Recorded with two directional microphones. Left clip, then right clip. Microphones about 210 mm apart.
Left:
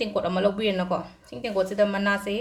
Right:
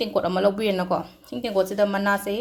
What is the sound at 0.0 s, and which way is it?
Speech, 25° right (ahead or behind).